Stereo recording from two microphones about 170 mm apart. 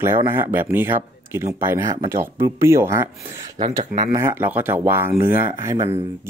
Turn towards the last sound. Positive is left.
turn(degrees=-15)  # may be behind; listen again after turning